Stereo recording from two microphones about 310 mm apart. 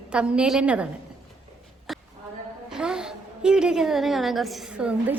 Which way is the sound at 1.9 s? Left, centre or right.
Centre.